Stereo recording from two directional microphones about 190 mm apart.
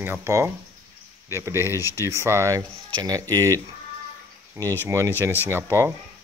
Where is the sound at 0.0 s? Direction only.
15° right (ahead or behind).